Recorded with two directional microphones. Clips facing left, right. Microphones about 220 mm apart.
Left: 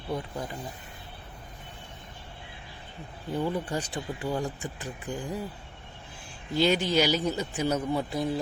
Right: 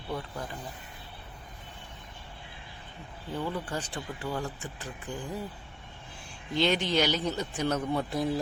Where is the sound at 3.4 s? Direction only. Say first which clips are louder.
Left 4 dB; 15° left (ahead or behind).